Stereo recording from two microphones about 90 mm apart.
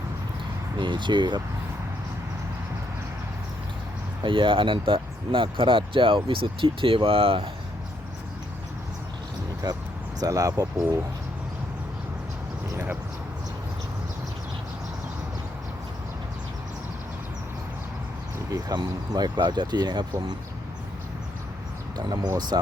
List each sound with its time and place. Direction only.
0.8 s speech: 60° right (ahead or behind)
4.2 s speech: 70° right (ahead or behind); by 7.5 s 90° right
9.6 s speech: 50° right (ahead or behind)
12.7 s a sound: 25° right (ahead or behind)
18.5 s speech: 45° right (ahead or behind)
21.9 s speech: 50° right (ahead or behind)